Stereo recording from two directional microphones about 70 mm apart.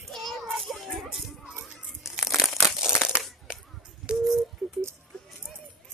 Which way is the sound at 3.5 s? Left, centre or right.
Centre.